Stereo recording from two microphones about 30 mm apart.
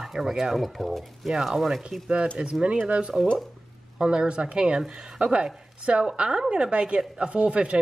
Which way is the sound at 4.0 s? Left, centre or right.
Right.